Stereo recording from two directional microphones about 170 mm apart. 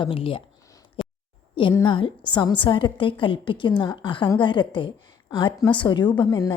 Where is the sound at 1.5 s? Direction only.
30° left (ahead or behind).